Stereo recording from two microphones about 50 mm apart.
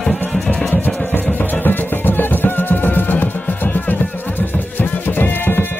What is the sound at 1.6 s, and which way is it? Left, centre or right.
Music, left.